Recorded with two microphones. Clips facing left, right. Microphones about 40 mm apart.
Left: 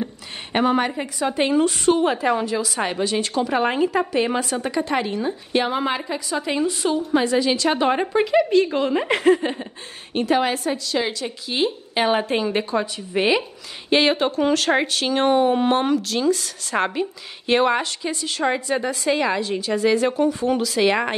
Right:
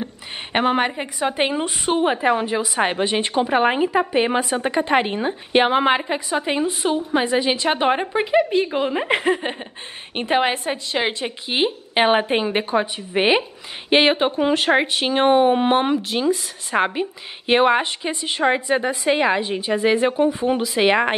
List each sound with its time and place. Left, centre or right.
0.5 s speech: right